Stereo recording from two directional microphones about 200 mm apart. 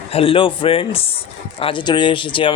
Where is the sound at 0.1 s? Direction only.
30° left (ahead or behind).